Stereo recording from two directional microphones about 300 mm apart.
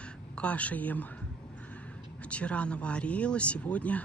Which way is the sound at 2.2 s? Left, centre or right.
Centre.